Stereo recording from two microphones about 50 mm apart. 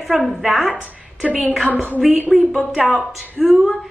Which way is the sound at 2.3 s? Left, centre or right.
Centre.